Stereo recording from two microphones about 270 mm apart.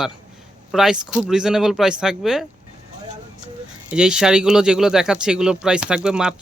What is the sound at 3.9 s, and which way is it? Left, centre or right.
Speech, centre.